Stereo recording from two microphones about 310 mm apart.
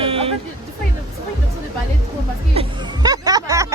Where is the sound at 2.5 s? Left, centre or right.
Centre.